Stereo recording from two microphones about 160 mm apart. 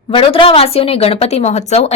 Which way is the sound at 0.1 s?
35° left (ahead or behind).